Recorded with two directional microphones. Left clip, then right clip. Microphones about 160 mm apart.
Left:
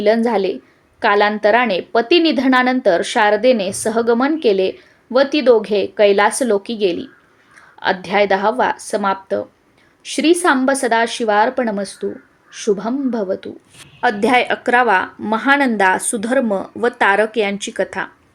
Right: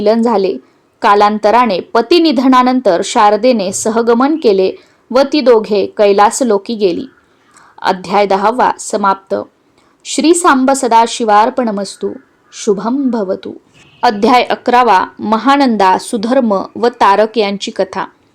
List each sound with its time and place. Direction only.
0.0 s a woman's voice: 35° right (ahead or behind)